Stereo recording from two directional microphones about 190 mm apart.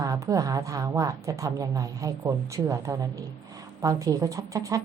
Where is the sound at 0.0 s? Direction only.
20° right (ahead or behind).